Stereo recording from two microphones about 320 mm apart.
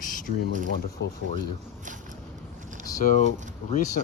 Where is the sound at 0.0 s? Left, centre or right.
Left.